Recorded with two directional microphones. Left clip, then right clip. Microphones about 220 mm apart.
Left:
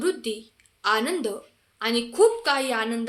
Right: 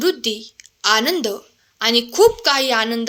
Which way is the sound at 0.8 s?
40° right (ahead or behind).